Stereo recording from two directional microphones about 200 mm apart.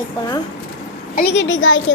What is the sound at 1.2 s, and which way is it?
Speech, 55° left (ahead or behind).